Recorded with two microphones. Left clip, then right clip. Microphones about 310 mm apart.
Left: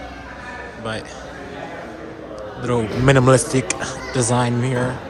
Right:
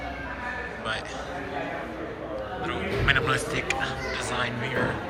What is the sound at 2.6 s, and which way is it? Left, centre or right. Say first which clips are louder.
A man's voice: left 8 dB; left.